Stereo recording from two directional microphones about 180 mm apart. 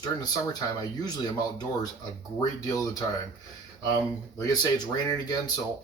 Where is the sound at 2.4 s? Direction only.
20° left (ahead or behind).